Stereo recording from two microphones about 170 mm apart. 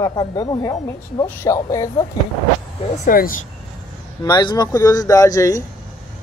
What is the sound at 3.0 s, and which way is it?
Speech, 55° left (ahead or behind).